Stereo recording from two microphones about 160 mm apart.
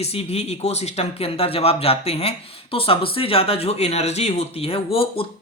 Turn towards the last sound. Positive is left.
turn(degrees=35)  # may be behind; listen again after turning